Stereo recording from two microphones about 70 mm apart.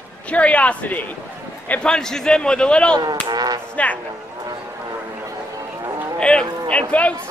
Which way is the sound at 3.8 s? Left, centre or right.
Centre.